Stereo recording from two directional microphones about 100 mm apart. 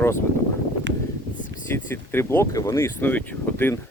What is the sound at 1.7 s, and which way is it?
Speech, 25° left (ahead or behind).